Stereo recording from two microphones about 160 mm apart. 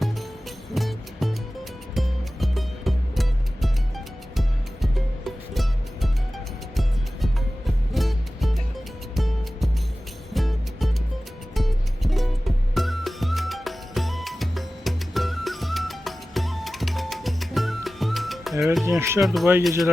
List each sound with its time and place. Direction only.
0.7 s music: centre (ahead or behind)
7.9 s music: centre (ahead or behind)
18.9 s speech: 15° right (ahead or behind)
19.2 s speech: centre (ahead or behind)